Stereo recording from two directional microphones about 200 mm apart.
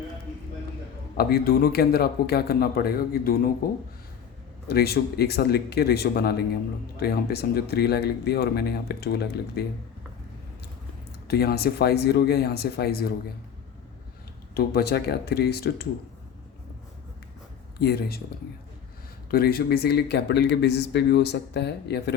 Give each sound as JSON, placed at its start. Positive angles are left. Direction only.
{"t": 1.1, "sound": "speech", "side_deg": 50}
{"t": 4.7, "sound": "speech", "side_deg": 50}
{"t": 11.3, "sound": "speech", "side_deg": 50}
{"t": 14.5, "sound": "speech", "side_deg": 50}
{"t": 17.7, "sound": "speech", "side_deg": 50}
{"t": 19.3, "sound": "speech", "side_deg": 50}